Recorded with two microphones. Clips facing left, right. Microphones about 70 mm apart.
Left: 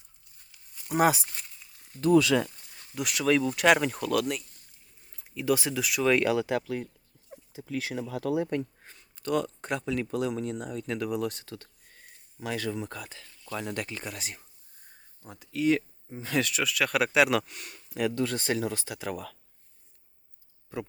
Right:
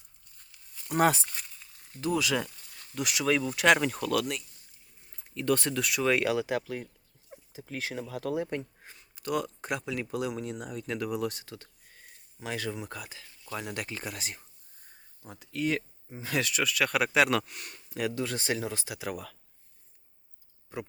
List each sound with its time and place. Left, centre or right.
0.5 s a sound: centre
2.0 s speech: centre
7.6 s speech: right
8.0 s speech: left
8.8 s speech: centre
11.4 s speech: centre
12.9 s speech: centre
18.1 s speech: centre
18.9 s speech: centre